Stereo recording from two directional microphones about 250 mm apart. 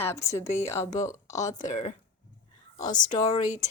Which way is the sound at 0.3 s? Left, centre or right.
Centre.